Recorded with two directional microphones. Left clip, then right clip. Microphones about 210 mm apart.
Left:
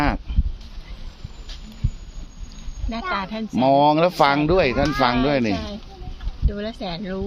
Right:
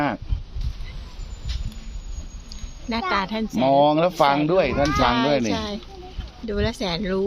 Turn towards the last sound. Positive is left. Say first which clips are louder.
# right 4 dB
turn(degrees=-30)  # may be behind; listen again after turning